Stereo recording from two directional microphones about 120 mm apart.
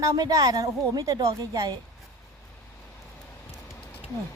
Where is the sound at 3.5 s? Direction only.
20° left (ahead or behind).